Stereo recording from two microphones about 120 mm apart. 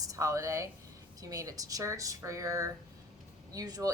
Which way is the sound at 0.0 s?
25° right (ahead or behind).